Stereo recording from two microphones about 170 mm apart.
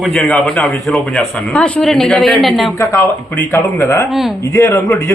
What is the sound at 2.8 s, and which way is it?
Speech, 15° left (ahead or behind).